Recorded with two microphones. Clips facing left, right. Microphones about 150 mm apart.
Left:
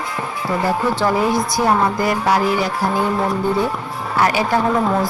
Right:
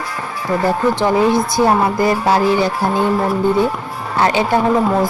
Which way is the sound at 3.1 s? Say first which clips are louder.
Right 3 dB; 5° right (ahead or behind).